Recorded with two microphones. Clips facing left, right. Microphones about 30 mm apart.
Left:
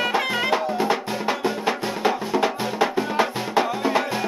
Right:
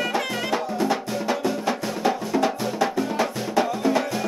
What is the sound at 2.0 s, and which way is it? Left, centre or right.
Music, left.